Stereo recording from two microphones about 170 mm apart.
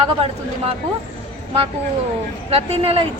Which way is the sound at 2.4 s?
35° right (ahead or behind).